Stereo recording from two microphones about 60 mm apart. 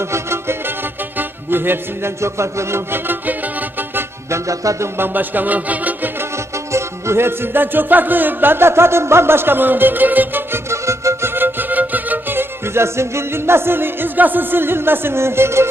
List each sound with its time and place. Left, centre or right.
0.0 s music: right
4.3 s music: right
4.9 s music: right
6.3 s music: right
10.7 s music: right